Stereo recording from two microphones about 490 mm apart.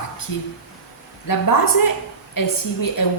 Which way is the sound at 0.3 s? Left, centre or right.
Left.